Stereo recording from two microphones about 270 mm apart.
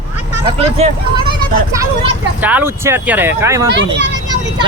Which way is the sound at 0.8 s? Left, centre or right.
Right.